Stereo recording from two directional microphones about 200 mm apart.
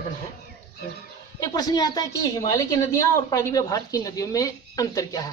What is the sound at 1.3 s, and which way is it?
A woman's voice, 20° left (ahead or behind).